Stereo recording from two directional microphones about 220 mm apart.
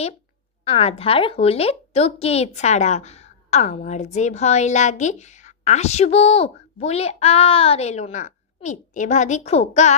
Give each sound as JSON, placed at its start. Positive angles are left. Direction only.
{"t": 0.7, "sound": "a woman's voice", "side_deg": 25}